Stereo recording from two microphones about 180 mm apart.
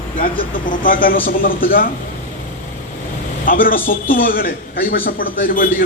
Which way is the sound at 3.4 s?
50° left (ahead or behind).